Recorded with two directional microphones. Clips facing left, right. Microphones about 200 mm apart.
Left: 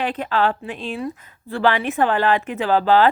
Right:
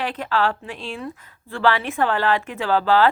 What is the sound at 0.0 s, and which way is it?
Speech, 20° left (ahead or behind).